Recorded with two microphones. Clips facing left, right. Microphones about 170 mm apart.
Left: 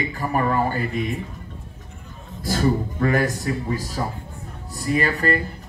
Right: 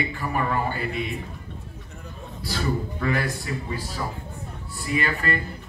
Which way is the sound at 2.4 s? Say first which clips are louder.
Left 6 dB; 45° left (ahead or behind).